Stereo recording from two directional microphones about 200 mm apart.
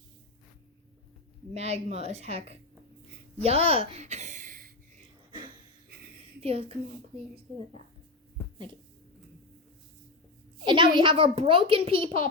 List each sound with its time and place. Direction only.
1.5 s a woman's voice: 30° right (ahead or behind)
6.4 s a child's voice: 30° right (ahead or behind)
10.7 s a child's voice: 25° right (ahead or behind)